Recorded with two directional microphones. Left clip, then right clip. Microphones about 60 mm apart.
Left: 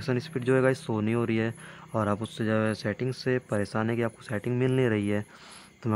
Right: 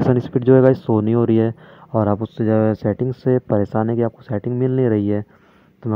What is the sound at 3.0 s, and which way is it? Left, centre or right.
Speech, right.